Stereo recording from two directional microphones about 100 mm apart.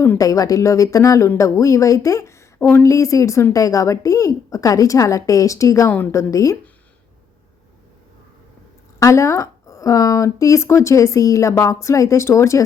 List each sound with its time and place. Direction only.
0.2 s speech: 35° left (ahead or behind)
9.0 s speech: 35° left (ahead or behind)